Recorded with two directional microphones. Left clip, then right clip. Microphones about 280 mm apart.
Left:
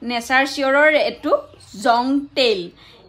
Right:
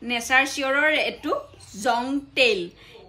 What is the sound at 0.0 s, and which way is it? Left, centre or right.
A woman's voice, left.